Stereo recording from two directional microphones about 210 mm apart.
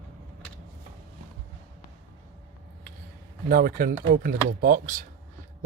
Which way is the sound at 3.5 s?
40° right (ahead or behind).